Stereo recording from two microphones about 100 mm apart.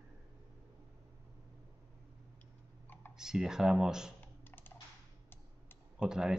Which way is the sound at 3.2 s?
5° right (ahead or behind).